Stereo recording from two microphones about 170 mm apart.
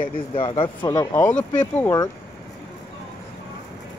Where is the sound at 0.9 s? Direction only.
10° left (ahead or behind).